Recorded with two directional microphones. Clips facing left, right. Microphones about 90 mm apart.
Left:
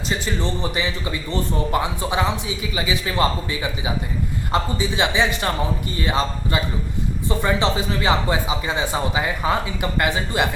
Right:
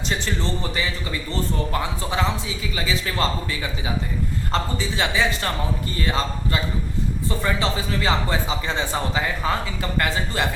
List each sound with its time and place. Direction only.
0.3 s a man's voice: 15° left (ahead or behind)